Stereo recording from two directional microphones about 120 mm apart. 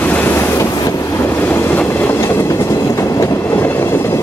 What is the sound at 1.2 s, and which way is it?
Train, 15° left (ahead or behind).